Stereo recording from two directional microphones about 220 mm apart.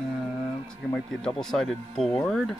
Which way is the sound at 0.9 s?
5° left (ahead or behind).